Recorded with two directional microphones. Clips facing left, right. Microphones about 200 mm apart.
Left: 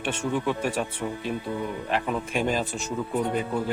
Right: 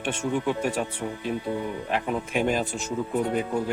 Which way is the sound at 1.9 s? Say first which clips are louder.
Left 1 dB; 15° right (ahead or behind).